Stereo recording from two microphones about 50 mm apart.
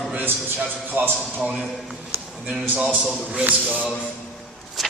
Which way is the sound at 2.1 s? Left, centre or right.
Right.